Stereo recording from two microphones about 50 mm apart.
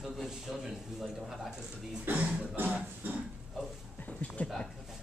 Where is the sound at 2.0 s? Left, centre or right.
Right.